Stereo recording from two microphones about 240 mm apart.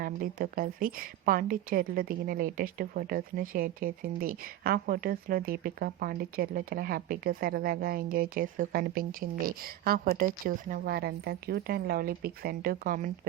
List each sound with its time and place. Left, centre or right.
0.0 s a woman's voice: right